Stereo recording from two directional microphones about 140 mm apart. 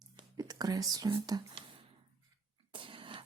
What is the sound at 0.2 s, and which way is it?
Speech, 30° right (ahead or behind).